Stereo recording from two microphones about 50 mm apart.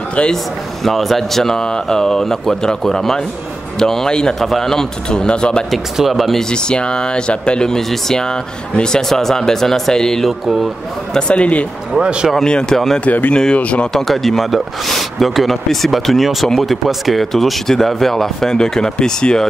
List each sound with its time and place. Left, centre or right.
0.8 s speech: centre
5.9 s speech: centre
6.5 s speech: centre
11.1 s speech: left
11.9 s speech: centre
12.4 s speech: centre
13.0 s speech: left
13.9 s speech: centre